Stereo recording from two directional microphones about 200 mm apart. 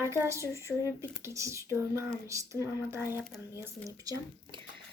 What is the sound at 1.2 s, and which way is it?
A woman's voice, 15° right (ahead or behind).